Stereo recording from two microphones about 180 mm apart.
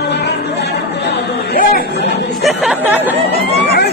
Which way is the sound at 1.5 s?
55° left (ahead or behind).